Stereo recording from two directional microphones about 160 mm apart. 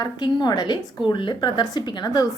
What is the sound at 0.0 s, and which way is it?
A woman's voice, 25° left (ahead or behind).